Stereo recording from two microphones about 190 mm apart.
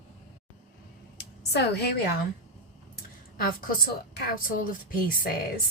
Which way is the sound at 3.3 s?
50° left (ahead or behind).